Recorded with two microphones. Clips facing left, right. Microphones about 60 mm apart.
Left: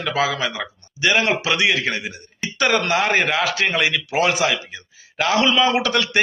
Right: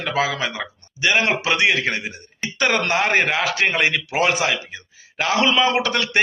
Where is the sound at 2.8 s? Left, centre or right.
Right.